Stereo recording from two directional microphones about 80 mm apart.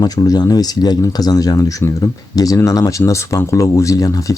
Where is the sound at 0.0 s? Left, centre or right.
Left.